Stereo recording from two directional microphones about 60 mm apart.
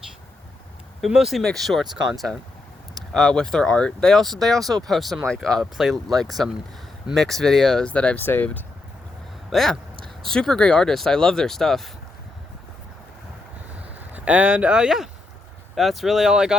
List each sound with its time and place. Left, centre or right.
1.0 s speech: centre
3.1 s speech: centre
7.9 s speech: left
8.2 s speech: left
9.5 s speech: centre
14.1 s speech: right